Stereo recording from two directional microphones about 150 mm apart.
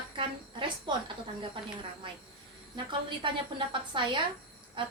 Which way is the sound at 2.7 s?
30° right (ahead or behind).